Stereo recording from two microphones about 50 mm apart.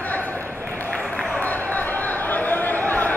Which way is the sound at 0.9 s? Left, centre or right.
Left.